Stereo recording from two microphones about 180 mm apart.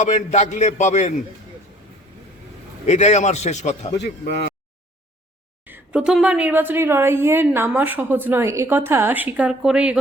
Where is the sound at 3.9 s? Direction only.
70° left (ahead or behind).